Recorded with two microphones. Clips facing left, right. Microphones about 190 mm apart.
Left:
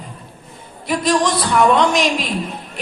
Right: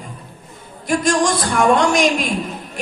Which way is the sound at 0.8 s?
50° right (ahead or behind).